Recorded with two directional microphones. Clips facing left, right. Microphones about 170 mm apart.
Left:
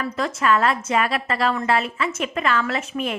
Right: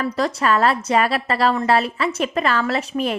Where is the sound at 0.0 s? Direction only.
35° right (ahead or behind).